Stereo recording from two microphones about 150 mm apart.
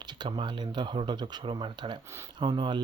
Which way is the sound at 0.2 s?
30° right (ahead or behind).